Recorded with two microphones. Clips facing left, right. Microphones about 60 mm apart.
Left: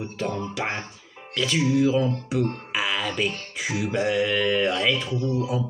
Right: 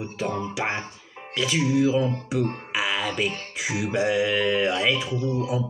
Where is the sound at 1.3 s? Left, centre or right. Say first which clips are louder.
Even; centre.